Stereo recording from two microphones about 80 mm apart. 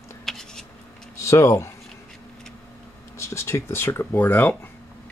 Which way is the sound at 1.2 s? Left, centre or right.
Left.